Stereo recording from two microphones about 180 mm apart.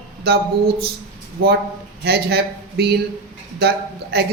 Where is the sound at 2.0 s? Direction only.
60° right (ahead or behind).